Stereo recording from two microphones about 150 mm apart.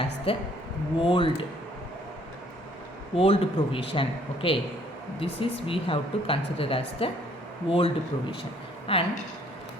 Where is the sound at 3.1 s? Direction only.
40° left (ahead or behind).